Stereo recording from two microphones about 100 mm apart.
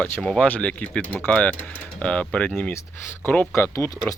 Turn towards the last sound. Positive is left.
turn(degrees=30)  # may be behind; listen again after turning